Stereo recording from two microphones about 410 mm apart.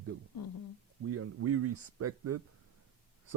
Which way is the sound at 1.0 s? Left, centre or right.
Right.